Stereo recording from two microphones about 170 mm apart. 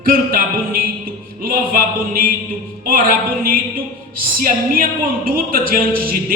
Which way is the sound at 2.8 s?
60° right (ahead or behind).